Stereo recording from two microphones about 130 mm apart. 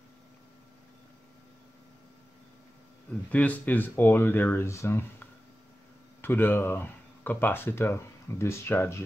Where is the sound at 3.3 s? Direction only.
10° left (ahead or behind).